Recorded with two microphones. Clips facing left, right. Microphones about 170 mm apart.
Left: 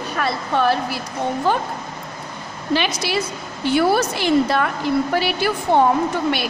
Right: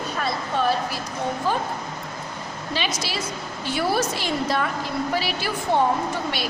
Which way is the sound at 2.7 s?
60° left (ahead or behind).